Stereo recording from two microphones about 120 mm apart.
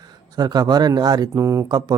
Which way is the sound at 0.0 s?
35° right (ahead or behind).